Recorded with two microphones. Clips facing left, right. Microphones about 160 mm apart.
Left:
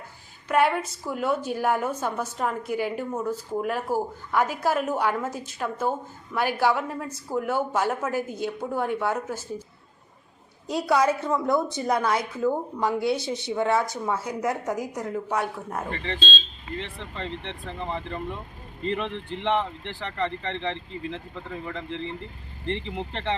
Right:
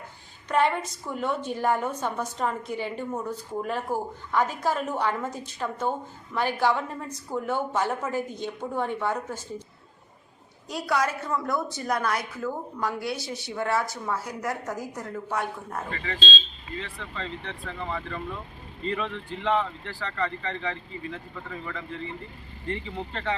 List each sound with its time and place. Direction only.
0.4 s a woman's voice: 5° left (ahead or behind)
10.7 s a woman's voice: 25° left (ahead or behind)
16.8 s a woman's voice: 20° left (ahead or behind)